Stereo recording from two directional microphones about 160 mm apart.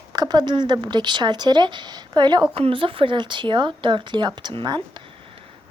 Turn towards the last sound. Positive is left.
turn(degrees=-30)  # may be behind; listen again after turning